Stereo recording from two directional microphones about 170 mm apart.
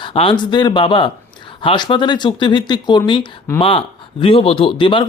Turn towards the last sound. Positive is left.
turn(degrees=30)  # may be behind; listen again after turning